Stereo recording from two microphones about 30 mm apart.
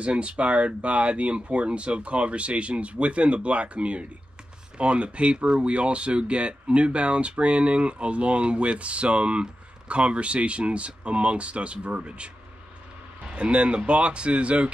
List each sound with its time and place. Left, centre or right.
0.0 s speech: right
13.3 s speech: right